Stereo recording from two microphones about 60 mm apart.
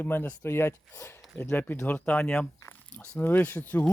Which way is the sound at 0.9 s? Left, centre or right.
Left.